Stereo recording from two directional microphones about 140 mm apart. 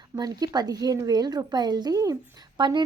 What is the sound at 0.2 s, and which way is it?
A woman's voice, 25° right (ahead or behind).